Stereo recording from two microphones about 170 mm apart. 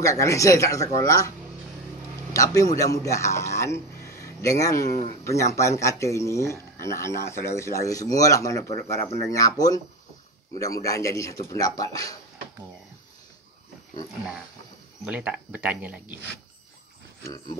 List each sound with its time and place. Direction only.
0.0 s speech: 20° left (ahead or behind)
2.3 s speech: 20° left (ahead or behind)
15.0 s speech: 5° right (ahead or behind)